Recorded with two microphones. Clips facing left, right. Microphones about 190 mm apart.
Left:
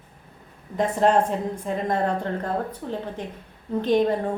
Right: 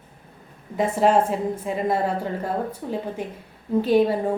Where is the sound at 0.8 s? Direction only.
5° right (ahead or behind).